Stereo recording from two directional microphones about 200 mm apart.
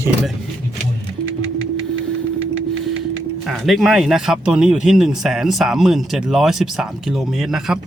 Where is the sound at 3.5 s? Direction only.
Centre (ahead or behind).